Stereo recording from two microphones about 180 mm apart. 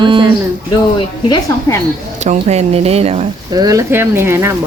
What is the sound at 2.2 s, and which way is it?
Speech, 40° right (ahead or behind).